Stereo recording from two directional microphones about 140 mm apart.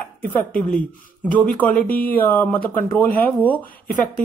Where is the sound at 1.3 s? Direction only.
10° left (ahead or behind).